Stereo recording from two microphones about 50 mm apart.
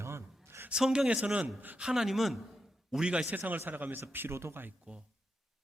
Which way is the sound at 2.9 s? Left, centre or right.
Centre.